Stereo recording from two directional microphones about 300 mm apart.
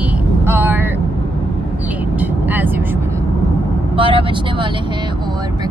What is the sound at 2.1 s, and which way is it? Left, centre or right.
Vehicle, centre.